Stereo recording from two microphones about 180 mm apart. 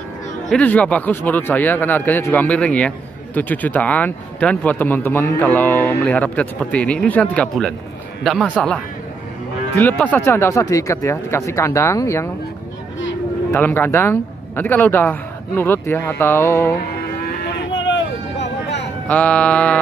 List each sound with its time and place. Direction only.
0.5 s a man's voice: 10° left (ahead or behind)
9.8 s speech: 10° left (ahead or behind)
13.5 s speech: 10° left (ahead or behind)
17.7 s a sound: 90° left
19.0 s speech: 10° left (ahead or behind)